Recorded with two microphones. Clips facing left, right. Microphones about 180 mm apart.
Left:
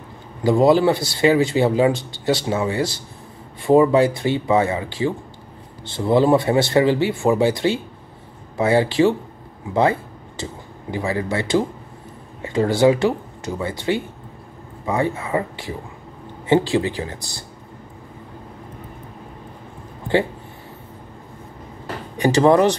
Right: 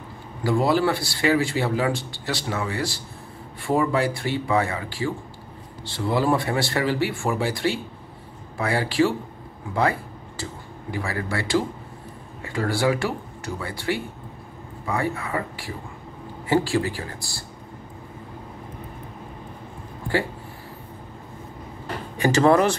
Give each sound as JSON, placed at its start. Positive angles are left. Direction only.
{"t": 0.4, "sound": "speech", "side_deg": 20}
{"t": 22.1, "sound": "speech", "side_deg": 15}